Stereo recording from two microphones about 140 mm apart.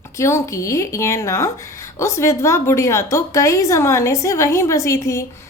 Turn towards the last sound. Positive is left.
turn(degrees=20)  # may be behind; listen again after turning